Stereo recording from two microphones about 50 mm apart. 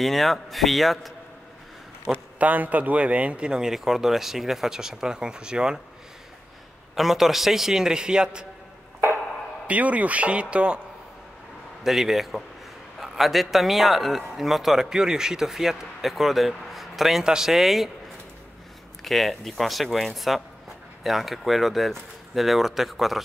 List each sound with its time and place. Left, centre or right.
0.0 s a man's voice: centre
2.0 s a man's voice: right
3.7 s speech: centre
7.0 s speech: centre
9.7 s a man's voice: right
11.8 s a man's voice: centre
17.2 s speech: centre
17.5 s a man's voice: centre
19.0 s a man's voice: centre